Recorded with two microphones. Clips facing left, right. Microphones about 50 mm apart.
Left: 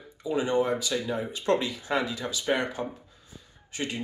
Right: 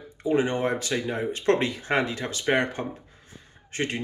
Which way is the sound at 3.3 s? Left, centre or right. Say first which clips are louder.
Right 2 dB; right.